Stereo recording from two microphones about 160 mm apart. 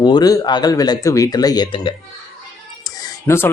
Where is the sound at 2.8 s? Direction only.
20° left (ahead or behind).